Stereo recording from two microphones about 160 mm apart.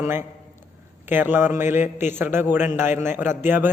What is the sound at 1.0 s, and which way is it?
A man's voice, 15° right (ahead or behind).